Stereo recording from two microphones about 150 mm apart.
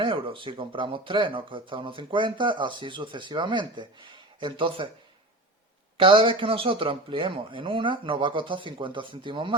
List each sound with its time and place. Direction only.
0.0 s speech: 35° right (ahead or behind)
6.0 s speech: 35° right (ahead or behind)